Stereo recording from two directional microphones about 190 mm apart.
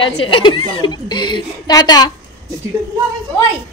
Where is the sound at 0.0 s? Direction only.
25° left (ahead or behind).